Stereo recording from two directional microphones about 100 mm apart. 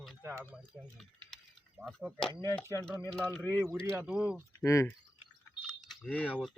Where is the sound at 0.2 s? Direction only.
25° right (ahead or behind).